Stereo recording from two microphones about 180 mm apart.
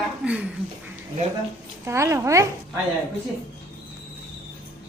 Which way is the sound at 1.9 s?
15° right (ahead or behind).